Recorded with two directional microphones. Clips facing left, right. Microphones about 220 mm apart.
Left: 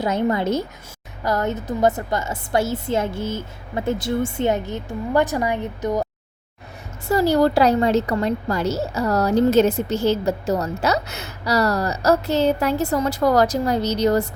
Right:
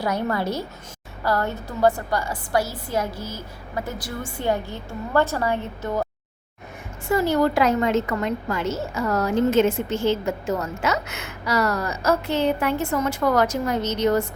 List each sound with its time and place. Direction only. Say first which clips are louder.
0.0 s a woman's voice: left 4 dB; 20° left (ahead or behind)
7.1 s a woman's voice: left 3 dB; 35° left (ahead or behind)